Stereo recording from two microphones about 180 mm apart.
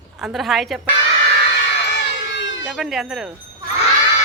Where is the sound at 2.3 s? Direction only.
85° left.